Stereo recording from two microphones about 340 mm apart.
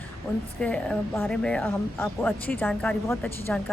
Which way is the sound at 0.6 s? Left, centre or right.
Centre.